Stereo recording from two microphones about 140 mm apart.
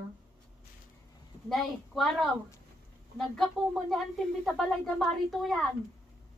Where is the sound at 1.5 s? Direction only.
Centre (ahead or behind).